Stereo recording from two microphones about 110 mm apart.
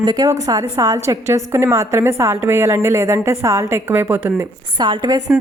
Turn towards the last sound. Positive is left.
turn(degrees=-40)  # may be behind; listen again after turning